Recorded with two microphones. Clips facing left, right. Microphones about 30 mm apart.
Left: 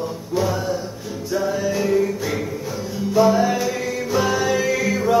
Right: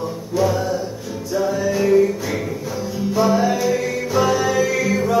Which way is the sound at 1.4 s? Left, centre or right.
Centre.